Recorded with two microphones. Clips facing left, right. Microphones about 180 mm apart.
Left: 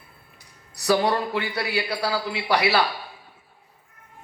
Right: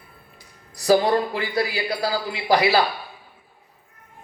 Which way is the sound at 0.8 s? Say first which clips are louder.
Right 4 dB; 70° left (ahead or behind).